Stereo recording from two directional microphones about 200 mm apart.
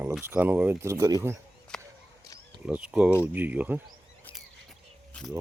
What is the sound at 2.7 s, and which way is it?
Speech, 5° right (ahead or behind).